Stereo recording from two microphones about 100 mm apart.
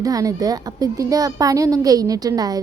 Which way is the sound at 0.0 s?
35° right (ahead or behind).